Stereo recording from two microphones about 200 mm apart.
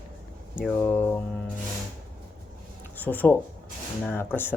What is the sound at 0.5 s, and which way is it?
Speech, centre (ahead or behind).